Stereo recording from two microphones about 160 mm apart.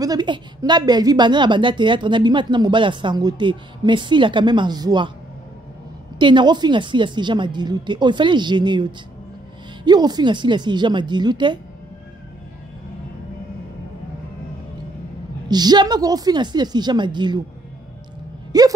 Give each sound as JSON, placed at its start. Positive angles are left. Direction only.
{"t": 0.0, "sound": "a woman's voice", "side_deg": -25}
{"t": 6.1, "sound": "a woman's voice", "side_deg": -30}
{"t": 15.4, "sound": "a woman's voice", "side_deg": -25}
{"t": 18.5, "sound": "a sound", "side_deg": -25}